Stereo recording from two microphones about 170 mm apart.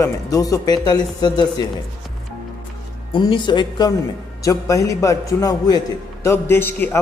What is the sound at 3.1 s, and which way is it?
A man's voice, 30° left (ahead or behind).